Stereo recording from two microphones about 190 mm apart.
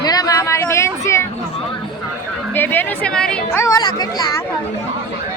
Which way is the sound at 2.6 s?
10° left (ahead or behind).